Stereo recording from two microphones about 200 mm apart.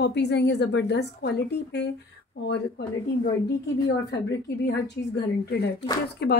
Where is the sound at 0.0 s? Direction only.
60° left (ahead or behind).